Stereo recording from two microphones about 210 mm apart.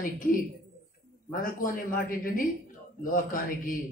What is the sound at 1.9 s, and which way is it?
A man's voice, 40° left (ahead or behind).